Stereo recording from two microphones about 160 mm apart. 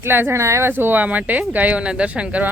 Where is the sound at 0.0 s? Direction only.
15° right (ahead or behind).